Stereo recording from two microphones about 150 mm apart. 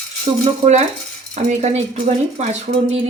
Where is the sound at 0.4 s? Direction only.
45° right (ahead or behind).